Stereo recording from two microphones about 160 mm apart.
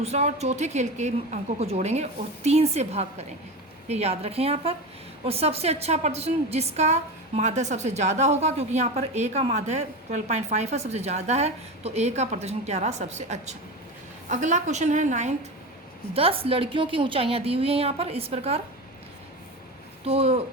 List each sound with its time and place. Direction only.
0.0 s a woman's voice: 40° right (ahead or behind)
16.1 s a woman's voice: 35° right (ahead or behind)
20.1 s a woman's voice: 40° right (ahead or behind)